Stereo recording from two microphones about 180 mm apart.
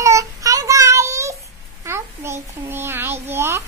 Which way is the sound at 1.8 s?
15° right (ahead or behind).